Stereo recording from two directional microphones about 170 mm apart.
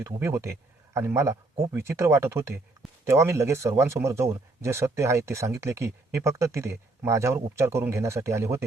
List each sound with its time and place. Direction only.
0.0 s speech: 15° right (ahead or behind)